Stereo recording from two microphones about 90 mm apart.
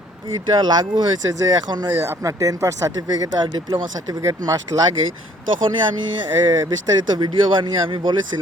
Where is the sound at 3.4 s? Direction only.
60° right (ahead or behind).